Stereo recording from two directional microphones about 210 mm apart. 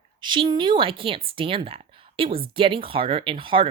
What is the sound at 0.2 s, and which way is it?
Speech, 20° right (ahead or behind).